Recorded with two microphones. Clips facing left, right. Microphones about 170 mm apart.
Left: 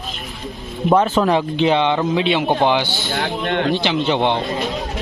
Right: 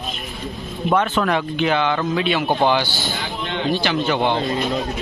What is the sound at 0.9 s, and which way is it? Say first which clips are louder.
A man's voice: left 4 dB; 35° left (ahead or behind).